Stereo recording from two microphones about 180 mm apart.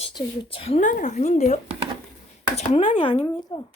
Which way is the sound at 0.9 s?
45° left (ahead or behind).